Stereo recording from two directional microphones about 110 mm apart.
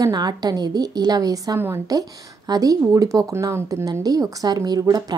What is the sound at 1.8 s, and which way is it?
Speech, 35° right (ahead or behind).